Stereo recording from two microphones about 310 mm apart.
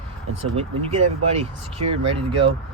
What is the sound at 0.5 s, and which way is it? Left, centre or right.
Speech, right.